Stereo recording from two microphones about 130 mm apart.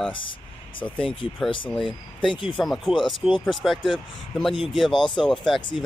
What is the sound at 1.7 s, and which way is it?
Speech, 5° left (ahead or behind).